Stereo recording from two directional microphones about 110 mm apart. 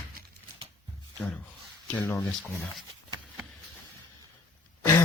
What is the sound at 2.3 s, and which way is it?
Speech, centre (ahead or behind).